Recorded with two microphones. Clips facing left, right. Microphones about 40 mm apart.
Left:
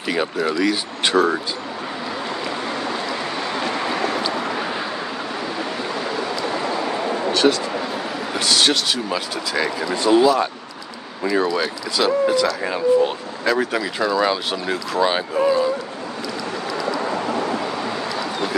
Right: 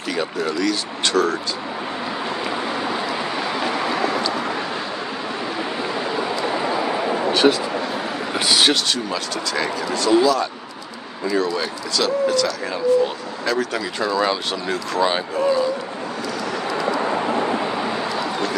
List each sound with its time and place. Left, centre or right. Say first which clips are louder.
0.0 s speech: left 2 dB; centre
2.5 s vehicle: right 1 dB; centre
5.9 s a sound: right 2 dB; centre
8.4 s speech: right 1 dB; centre
8.7 s speech: even; centre
9.9 s speech: left 1 dB; left
11.5 s speech: left 1 dB; centre
16.8 s vehicle: right 2 dB; right